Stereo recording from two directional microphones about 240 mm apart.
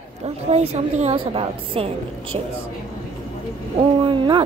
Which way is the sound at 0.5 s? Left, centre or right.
Right.